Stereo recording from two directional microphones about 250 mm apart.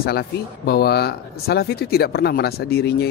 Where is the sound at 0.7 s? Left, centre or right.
Left.